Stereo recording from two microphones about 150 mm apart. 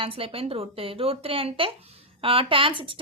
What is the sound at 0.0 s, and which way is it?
A woman's voice, 40° right (ahead or behind).